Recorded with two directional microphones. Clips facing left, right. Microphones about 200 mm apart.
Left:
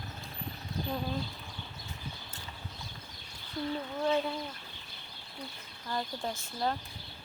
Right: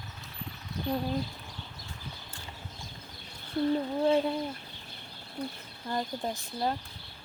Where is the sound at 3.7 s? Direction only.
30° right (ahead or behind).